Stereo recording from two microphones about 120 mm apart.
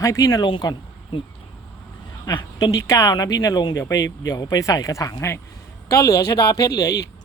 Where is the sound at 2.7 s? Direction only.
25° left (ahead or behind).